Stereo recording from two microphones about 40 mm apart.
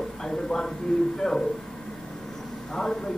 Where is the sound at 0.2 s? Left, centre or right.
Centre.